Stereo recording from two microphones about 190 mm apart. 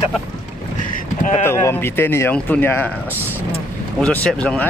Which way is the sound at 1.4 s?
15° left (ahead or behind).